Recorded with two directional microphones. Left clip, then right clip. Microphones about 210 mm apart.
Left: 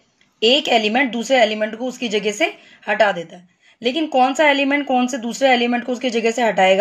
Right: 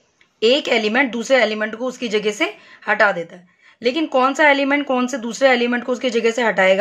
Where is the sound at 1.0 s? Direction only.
20° right (ahead or behind).